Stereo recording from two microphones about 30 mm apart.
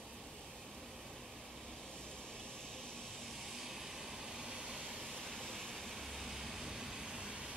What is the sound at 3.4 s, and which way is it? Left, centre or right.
Vehicle, centre.